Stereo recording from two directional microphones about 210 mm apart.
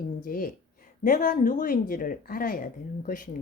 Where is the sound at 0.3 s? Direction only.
40° left (ahead or behind).